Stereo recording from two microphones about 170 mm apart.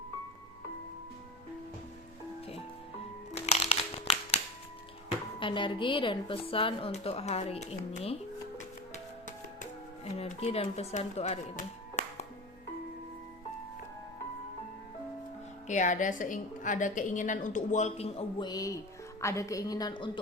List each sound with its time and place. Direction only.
3.3 s crumpling: 35° left (ahead or behind)
5.4 s a woman's voice: 30° left (ahead or behind)
10.2 s speech: 35° left (ahead or behind)
15.6 s a woman's voice: 45° left (ahead or behind); by 20.1 s 25° left (ahead or behind)